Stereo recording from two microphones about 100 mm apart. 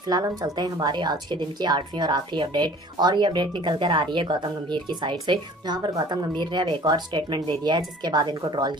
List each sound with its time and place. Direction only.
0.0 s a woman's voice: 40° right (ahead or behind)